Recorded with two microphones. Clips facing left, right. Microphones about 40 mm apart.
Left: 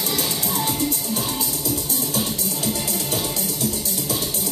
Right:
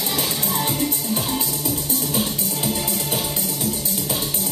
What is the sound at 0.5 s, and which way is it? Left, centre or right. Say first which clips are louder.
Music: even; centre.